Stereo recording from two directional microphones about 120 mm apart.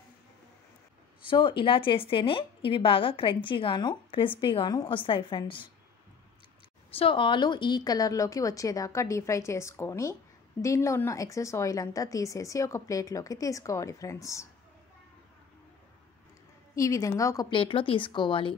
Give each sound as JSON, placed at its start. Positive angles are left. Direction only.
{"t": 1.2, "sound": "a woman's voice", "side_deg": 45}
{"t": 6.9, "sound": "speech", "side_deg": 50}
{"t": 16.7, "sound": "speech", "side_deg": 25}
{"t": 17.5, "sound": "a woman's voice", "side_deg": 45}